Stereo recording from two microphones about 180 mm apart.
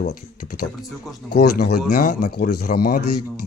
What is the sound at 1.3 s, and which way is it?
Speech, 60° left (ahead or behind).